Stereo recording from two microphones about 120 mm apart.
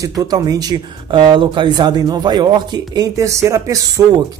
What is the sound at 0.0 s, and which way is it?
Speech, 30° right (ahead or behind).